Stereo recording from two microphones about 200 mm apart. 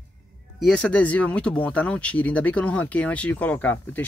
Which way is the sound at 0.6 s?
5° left (ahead or behind).